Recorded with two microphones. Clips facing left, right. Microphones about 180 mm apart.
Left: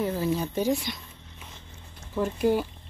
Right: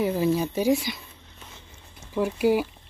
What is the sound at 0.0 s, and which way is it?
Speech, 10° right (ahead or behind).